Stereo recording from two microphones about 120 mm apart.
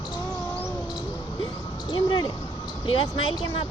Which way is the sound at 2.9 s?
45° left (ahead or behind).